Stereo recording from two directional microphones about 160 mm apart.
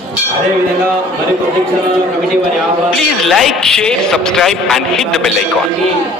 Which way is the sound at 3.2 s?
Centre (ahead or behind).